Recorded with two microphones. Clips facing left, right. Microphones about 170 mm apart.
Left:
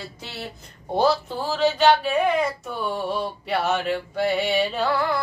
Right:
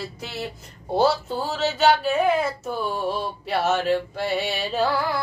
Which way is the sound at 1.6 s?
5° right (ahead or behind).